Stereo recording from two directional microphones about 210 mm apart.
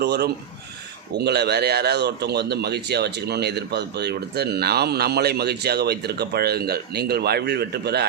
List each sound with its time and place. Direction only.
0.0 s speech: 50° right (ahead or behind)